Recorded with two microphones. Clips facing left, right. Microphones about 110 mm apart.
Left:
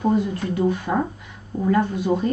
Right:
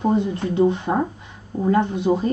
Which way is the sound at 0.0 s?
25° right (ahead or behind).